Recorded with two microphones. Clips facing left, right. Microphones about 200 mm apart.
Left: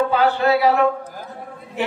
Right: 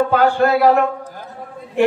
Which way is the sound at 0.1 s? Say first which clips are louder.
Right 2 dB; 50° right (ahead or behind).